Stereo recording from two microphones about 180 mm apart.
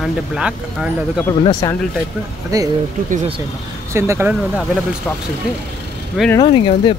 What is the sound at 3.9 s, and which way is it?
Speech, 15° right (ahead or behind).